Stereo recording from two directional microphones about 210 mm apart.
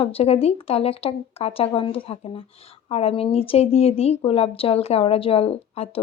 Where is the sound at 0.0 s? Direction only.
30° left (ahead or behind).